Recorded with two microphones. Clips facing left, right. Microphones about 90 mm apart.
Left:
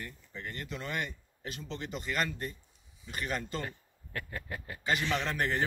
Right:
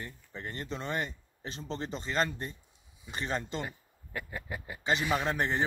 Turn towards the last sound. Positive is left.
turn(degrees=-20)  # may be behind; listen again after turning